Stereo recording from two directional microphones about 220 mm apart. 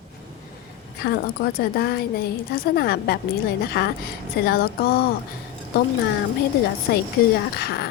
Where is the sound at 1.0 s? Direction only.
45° left (ahead or behind).